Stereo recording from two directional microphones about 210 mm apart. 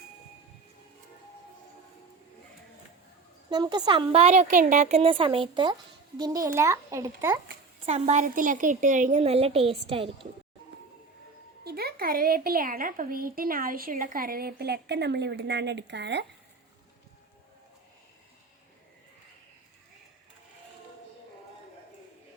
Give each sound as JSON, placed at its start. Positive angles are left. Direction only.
{"t": 3.5, "sound": "a woman's voice", "side_deg": -20}
{"t": 7.9, "sound": "a woman's voice", "side_deg": -35}
{"t": 11.6, "sound": "a woman's voice", "side_deg": -50}